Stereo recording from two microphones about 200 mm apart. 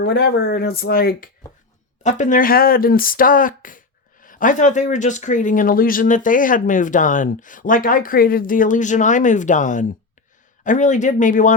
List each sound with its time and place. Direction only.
0.0 s speech: 50° left (ahead or behind)
2.0 s speech: 40° left (ahead or behind)